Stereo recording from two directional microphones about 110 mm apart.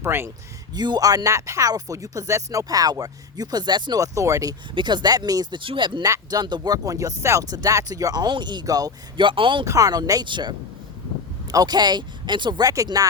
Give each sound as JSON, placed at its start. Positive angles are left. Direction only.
{"t": 0.0, "sound": "speech", "side_deg": -20}
{"t": 0.7, "sound": "speech", "side_deg": -40}
{"t": 4.7, "sound": "speech", "side_deg": -45}
{"t": 9.1, "sound": "speech", "side_deg": -50}
{"t": 9.6, "sound": "speech", "side_deg": -35}
{"t": 11.5, "sound": "speech", "side_deg": -40}